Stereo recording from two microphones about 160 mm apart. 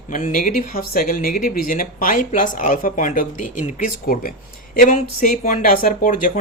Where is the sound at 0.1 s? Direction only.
55° left (ahead or behind).